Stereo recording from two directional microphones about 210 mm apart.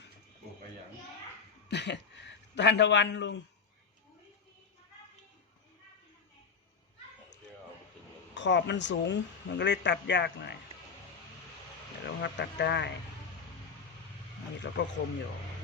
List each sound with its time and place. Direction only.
1.6 s a man's voice: 55° left (ahead or behind)
8.4 s a man's voice: 55° left (ahead or behind)
12.0 s a man's voice: 55° left (ahead or behind)
14.6 s a man's voice: 55° left (ahead or behind)